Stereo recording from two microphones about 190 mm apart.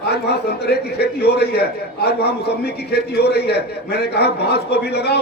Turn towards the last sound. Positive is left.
turn(degrees=60)  # may be behind; listen again after turning